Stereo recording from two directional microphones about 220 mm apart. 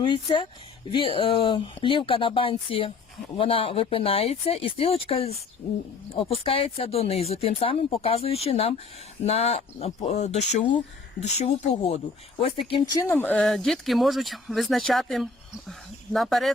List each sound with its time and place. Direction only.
0.0 s speech: 20° left (ahead or behind); by 16.5 s centre (ahead or behind)